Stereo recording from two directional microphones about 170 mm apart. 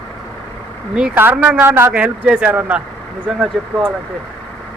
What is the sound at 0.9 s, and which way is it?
Speech, 10° right (ahead or behind).